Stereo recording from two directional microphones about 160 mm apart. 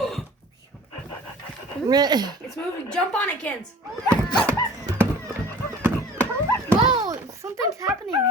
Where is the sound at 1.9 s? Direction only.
25° right (ahead or behind).